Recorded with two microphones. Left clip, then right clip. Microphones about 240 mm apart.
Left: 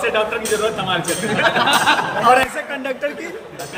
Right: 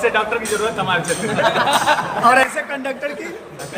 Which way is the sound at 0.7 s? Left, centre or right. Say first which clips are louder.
Right 2 dB; centre.